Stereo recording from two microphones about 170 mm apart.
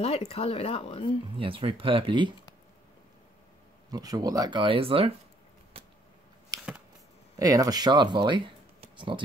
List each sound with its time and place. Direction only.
0.0 s speech: 35° left (ahead or behind)
1.3 s speech: 30° right (ahead or behind)
3.9 s speech: 20° right (ahead or behind)
6.5 s a sound: 20° right (ahead or behind)
7.3 s speech: 20° right (ahead or behind)